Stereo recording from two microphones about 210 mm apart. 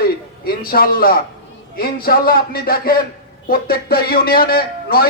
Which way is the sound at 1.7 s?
45° left (ahead or behind).